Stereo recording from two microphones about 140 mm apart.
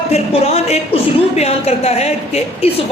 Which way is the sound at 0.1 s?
50° left (ahead or behind).